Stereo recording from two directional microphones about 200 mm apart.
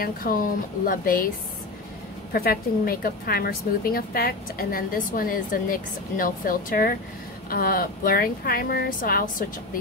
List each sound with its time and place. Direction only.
0.0 s a woman's voice: 45° left (ahead or behind)
2.3 s a woman's voice: 50° left (ahead or behind)